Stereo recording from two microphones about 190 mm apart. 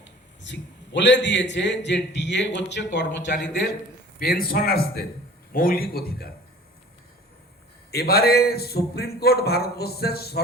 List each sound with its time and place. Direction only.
0.0 s a man's voice: 70° left (ahead or behind)
4.2 s a man's voice: 50° left (ahead or behind)
7.9 s a man's voice: 55° left (ahead or behind)